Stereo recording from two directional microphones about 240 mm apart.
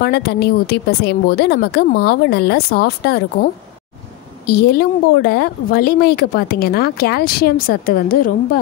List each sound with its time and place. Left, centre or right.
0.0 s a woman's voice: left
4.5 s speech: left